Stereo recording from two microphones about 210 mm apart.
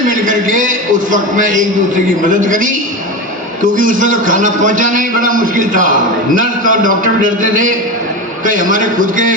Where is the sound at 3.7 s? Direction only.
40° right (ahead or behind).